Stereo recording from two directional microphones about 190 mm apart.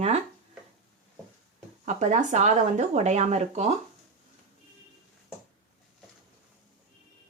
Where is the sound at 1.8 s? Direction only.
40° right (ahead or behind).